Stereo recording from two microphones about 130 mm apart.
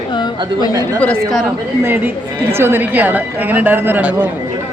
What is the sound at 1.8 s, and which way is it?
A woman's voice, 15° right (ahead or behind).